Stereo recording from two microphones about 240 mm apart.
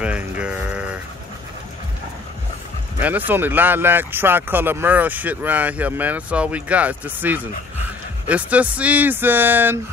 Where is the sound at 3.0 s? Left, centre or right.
Centre.